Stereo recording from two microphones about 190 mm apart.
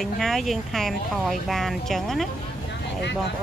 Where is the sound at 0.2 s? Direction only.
Centre (ahead or behind).